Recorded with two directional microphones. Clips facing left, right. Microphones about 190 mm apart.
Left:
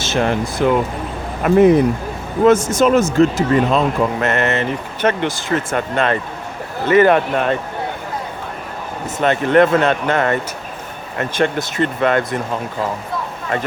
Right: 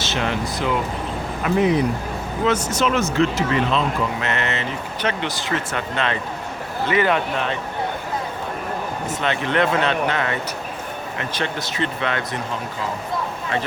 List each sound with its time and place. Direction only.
0.0 s speech: 50° left (ahead or behind)
9.2 s speech: 45° left (ahead or behind)